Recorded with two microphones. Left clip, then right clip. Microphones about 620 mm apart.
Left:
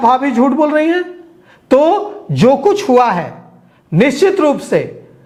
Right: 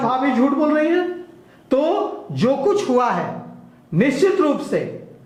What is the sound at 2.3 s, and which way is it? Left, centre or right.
A man's voice, left.